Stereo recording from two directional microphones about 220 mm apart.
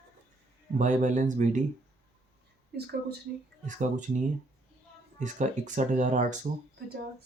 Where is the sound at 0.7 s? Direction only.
35° right (ahead or behind).